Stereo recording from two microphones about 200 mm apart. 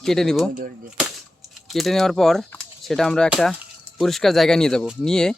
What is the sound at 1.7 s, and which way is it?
Speech, centre (ahead or behind).